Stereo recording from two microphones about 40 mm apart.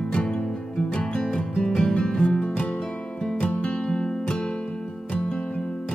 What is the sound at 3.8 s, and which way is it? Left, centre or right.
Music, left.